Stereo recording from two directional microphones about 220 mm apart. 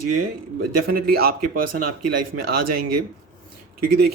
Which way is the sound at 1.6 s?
90° right.